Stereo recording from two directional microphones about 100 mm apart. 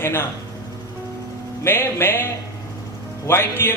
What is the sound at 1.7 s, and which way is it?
Speech, 20° left (ahead or behind).